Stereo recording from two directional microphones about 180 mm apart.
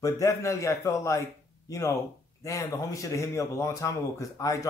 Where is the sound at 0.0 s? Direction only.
15° left (ahead or behind).